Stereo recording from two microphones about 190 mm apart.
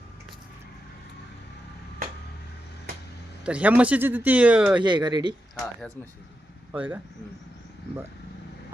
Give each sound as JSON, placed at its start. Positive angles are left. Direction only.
{"t": 3.4, "sound": "speech", "side_deg": -5}
{"t": 4.8, "sound": "speech", "side_deg": -25}
{"t": 6.7, "sound": "speech", "side_deg": -10}